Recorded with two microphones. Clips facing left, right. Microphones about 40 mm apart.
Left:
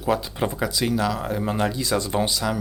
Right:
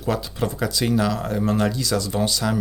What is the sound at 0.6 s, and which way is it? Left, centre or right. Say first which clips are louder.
Speech: right 3 dB; centre.